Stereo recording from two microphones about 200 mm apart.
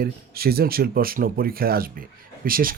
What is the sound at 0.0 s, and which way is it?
Speech, 50° right (ahead or behind).